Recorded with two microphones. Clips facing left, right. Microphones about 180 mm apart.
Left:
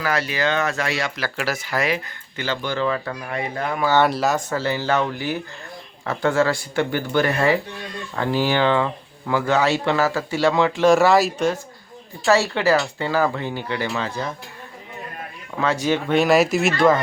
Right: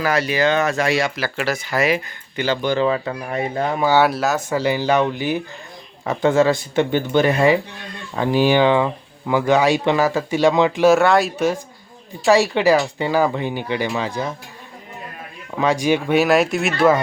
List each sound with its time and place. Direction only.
0.0 s speech: 15° right (ahead or behind)
1.9 s speech: 15° right (ahead or behind)
3.9 s speech: 5° right (ahead or behind)
10.8 s speech: centre (ahead or behind); by 14.3 s 15° right (ahead or behind)
15.6 s speech: 15° right (ahead or behind)